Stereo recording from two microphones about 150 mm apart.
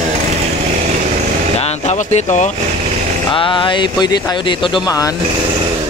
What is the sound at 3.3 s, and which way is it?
Speech, 35° left (ahead or behind).